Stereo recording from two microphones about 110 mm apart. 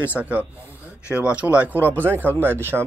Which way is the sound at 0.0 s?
15° right (ahead or behind).